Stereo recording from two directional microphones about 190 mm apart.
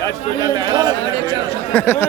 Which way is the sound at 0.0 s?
20° right (ahead or behind).